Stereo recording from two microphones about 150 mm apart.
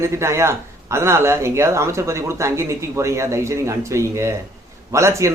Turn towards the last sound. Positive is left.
turn(degrees=-20)  # may be behind; listen again after turning